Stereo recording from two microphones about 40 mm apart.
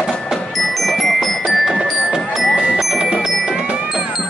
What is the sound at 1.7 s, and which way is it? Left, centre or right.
Music, centre.